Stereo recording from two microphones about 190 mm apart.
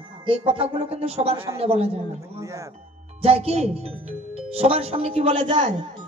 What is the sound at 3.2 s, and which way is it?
Music, 30° right (ahead or behind).